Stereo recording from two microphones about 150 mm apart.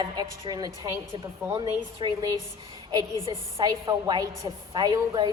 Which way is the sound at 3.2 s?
35° right (ahead or behind).